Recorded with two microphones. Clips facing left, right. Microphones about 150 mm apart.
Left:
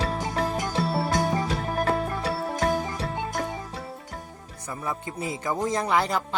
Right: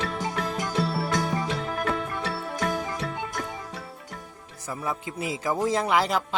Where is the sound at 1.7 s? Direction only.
35° left (ahead or behind).